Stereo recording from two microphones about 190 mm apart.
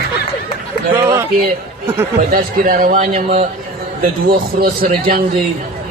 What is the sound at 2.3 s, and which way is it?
A man's voice, 50° right (ahead or behind).